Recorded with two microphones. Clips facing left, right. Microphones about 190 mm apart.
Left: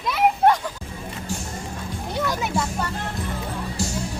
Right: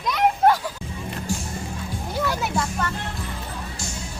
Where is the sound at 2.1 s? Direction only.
Centre (ahead or behind).